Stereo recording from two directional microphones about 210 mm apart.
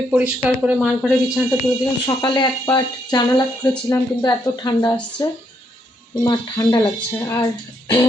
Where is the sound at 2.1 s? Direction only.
20° left (ahead or behind).